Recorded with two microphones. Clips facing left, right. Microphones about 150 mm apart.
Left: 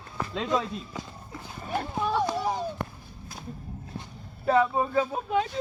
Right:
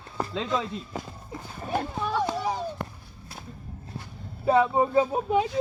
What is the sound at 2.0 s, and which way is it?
Children playing, centre (ahead or behind).